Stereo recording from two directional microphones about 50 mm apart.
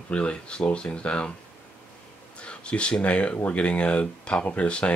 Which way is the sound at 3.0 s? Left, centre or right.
Left.